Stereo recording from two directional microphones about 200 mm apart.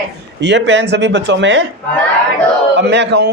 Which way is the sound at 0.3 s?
60° right (ahead or behind).